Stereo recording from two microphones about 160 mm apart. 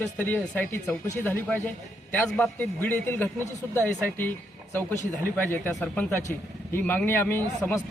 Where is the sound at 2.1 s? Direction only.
10° left (ahead or behind).